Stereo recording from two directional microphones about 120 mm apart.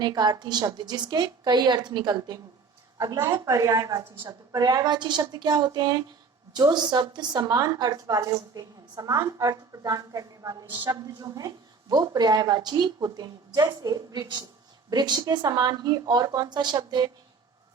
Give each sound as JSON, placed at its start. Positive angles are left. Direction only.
{"t": 0.0, "sound": "a woman's voice", "side_deg": -35}